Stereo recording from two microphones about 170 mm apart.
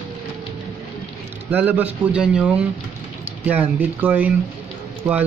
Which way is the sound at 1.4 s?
10° right (ahead or behind).